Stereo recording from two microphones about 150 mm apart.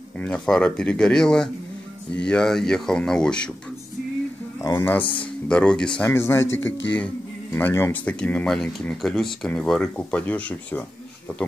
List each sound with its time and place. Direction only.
0.2 s speech: 10° left (ahead or behind)
4.6 s speech: 15° left (ahead or behind)
6.0 s speech: 15° left (ahead or behind)